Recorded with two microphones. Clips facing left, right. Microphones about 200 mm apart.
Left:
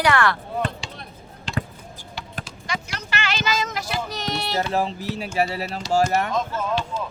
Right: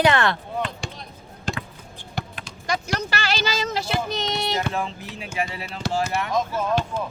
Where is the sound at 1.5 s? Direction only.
45° right (ahead or behind).